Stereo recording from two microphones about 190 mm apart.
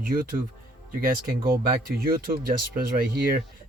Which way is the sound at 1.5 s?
50° right (ahead or behind).